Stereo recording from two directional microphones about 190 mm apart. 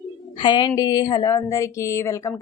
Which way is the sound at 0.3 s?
25° left (ahead or behind).